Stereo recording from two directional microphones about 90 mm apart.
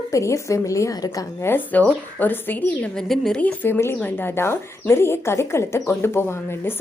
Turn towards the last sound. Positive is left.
turn(degrees=25)  # may be behind; listen again after turning